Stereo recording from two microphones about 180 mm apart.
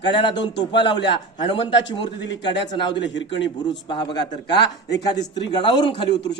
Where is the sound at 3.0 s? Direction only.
85° left.